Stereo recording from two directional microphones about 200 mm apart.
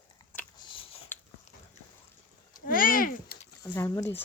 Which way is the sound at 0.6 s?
25° left (ahead or behind).